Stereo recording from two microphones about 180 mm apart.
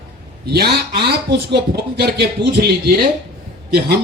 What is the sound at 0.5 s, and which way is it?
Speech, 60° right (ahead or behind).